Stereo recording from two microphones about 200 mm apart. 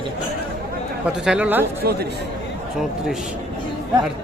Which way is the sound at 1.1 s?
5° right (ahead or behind).